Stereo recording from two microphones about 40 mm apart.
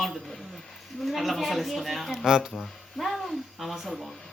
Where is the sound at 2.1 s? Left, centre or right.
Centre.